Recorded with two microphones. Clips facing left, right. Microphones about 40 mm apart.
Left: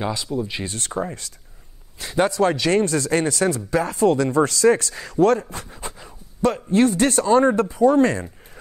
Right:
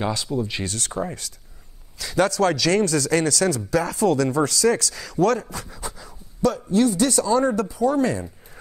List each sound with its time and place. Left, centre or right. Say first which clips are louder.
0.2 s speech: even; centre
0.7 s speech: left 4 dB; left
2.1 s speech: left 1 dB; left